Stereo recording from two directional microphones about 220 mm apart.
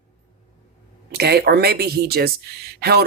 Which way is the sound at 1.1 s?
45° right (ahead or behind).